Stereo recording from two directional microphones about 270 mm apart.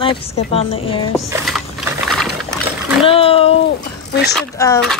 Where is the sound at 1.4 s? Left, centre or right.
Centre.